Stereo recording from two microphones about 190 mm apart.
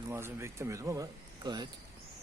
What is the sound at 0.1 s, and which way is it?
Speech, 15° right (ahead or behind).